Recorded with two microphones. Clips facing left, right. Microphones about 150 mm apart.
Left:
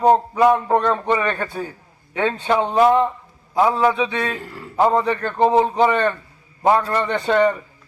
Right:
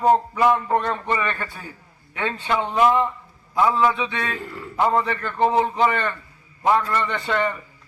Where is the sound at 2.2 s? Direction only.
45° left (ahead or behind).